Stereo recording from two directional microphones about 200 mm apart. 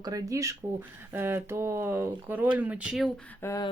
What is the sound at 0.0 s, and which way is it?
Speech, 20° right (ahead or behind).